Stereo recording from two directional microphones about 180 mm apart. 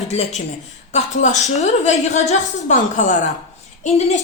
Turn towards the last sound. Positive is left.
turn(degrees=40)  # may be behind; listen again after turning